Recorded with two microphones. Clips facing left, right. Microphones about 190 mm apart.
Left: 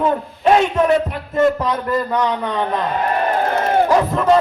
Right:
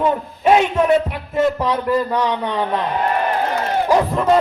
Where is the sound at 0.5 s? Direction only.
10° right (ahead or behind).